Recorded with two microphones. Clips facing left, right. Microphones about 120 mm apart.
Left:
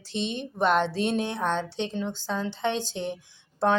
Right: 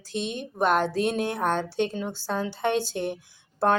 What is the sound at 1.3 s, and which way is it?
Speech, 10° right (ahead or behind).